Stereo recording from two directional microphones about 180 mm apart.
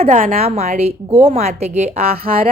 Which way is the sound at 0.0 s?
45° right (ahead or behind).